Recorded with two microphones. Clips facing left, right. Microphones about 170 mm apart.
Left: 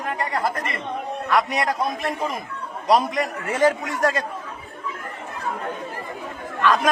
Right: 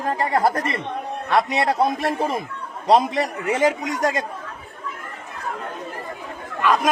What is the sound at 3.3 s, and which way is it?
Speech, 15° right (ahead or behind).